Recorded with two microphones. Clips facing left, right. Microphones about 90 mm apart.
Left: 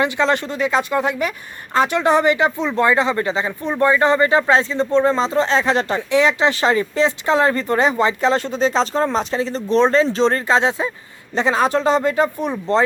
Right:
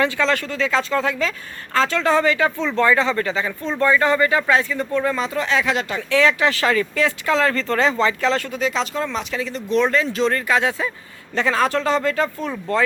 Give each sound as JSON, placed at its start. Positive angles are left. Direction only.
{"t": 0.0, "sound": "speech", "side_deg": 20}
{"t": 6.1, "sound": "speech", "side_deg": 20}